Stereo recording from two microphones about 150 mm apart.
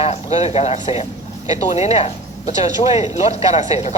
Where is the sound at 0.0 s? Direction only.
45° left (ahead or behind).